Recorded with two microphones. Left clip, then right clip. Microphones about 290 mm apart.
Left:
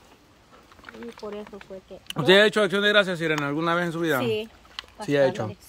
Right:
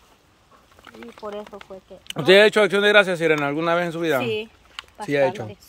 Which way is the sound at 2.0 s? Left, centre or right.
Centre.